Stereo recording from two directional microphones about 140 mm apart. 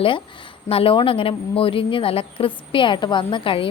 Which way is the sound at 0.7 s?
40° left (ahead or behind).